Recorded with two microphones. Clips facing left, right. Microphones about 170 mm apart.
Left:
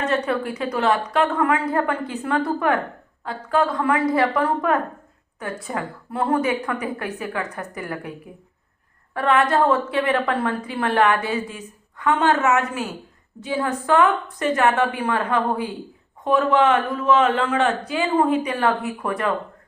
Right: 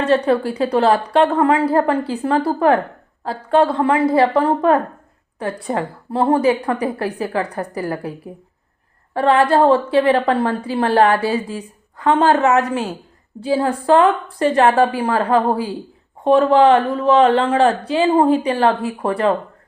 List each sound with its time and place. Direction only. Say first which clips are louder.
0.0 s a woman's voice: right 7 dB; 30° right (ahead or behind)
9.1 s a woman's voice: right 5 dB; 30° right (ahead or behind)